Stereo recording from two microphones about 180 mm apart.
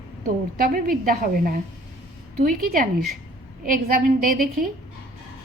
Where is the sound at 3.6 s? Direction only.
50° right (ahead or behind).